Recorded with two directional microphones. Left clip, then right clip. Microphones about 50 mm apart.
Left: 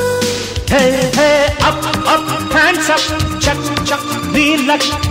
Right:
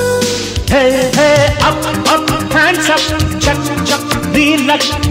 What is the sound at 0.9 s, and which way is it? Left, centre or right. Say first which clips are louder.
Music: right 2 dB; right.